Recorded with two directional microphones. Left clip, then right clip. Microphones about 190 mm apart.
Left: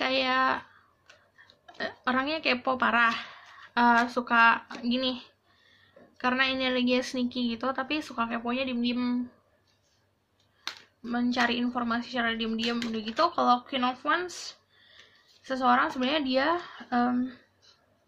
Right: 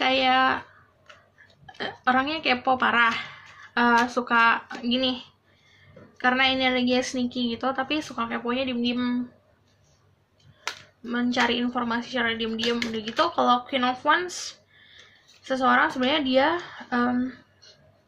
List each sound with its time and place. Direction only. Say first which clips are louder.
0.0 s a sound: right 5 dB; 20° left (ahead or behind)
1.8 s speech: right 5 dB; 25° left (ahead or behind)
11.0 s speech: right 3 dB; 20° left (ahead or behind)
15.4 s speech: right 3 dB; 20° left (ahead or behind)